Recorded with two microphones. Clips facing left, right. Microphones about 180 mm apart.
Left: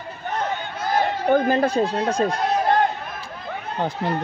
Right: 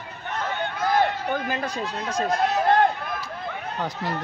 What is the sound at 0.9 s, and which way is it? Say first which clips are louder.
Speech: left 6 dB; 45° left (ahead or behind).